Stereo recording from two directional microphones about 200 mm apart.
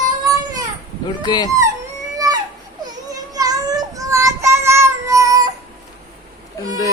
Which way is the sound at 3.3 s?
20° right (ahead or behind).